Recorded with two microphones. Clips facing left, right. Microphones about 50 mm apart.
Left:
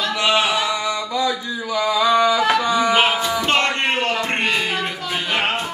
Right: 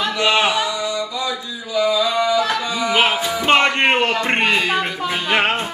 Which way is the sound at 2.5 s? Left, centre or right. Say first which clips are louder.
Left 4 dB; left.